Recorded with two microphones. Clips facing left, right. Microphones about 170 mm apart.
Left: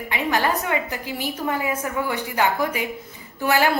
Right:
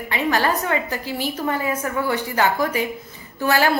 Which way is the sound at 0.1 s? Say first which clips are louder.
Right 2 dB; 15° left (ahead or behind).